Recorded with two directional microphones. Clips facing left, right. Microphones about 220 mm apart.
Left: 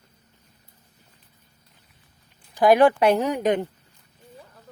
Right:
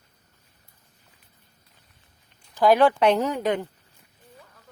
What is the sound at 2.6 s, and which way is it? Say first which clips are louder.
Speech: left 2 dB; 15° left (ahead or behind).